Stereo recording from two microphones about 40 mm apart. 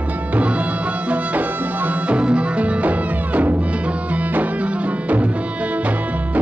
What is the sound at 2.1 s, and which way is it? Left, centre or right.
Music, right.